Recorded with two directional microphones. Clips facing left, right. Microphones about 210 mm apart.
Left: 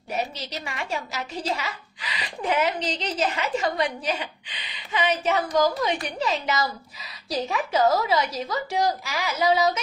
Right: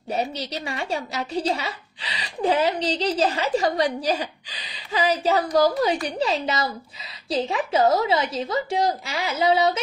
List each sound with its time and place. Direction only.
0.1 s a woman's voice: 35° right (ahead or behind)